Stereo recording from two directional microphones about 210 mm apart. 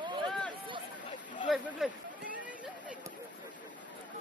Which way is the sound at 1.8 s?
Centre (ahead or behind).